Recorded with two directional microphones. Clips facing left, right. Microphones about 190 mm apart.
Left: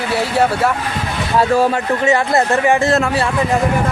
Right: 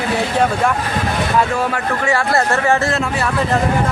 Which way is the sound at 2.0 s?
15° left (ahead or behind).